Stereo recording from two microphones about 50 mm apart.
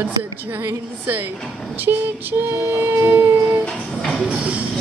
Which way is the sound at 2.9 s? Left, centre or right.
Right.